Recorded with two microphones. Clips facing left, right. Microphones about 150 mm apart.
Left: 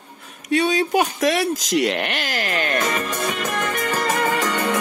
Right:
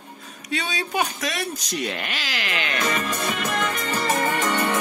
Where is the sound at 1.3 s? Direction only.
85° left; by 2.8 s 45° left (ahead or behind).